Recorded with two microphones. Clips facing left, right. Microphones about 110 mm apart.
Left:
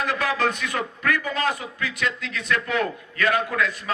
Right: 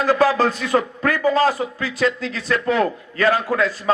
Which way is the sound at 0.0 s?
35° right (ahead or behind).